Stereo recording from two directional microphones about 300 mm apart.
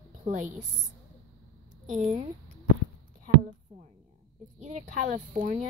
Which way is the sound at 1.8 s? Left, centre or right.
Right.